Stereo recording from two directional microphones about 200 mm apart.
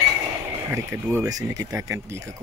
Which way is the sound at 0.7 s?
15° right (ahead or behind).